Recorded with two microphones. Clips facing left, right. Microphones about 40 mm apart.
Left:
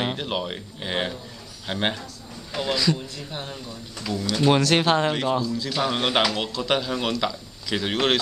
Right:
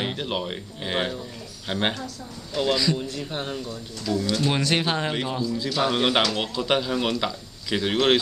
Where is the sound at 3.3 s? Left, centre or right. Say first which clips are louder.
Right 2 dB; right.